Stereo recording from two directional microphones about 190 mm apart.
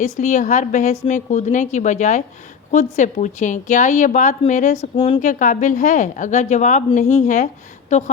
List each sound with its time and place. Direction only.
0.0 s a woman's voice: 40° left (ahead or behind)
5.2 s a woman's voice: 45° left (ahead or behind)